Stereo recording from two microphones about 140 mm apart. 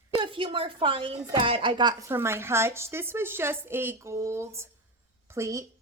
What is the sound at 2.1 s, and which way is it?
A woman's voice, 15° right (ahead or behind).